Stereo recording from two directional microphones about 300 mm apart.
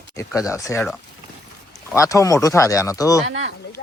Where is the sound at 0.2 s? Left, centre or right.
Centre.